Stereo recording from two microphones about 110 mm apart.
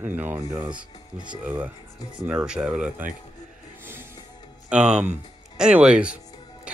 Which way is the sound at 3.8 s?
20° right (ahead or behind).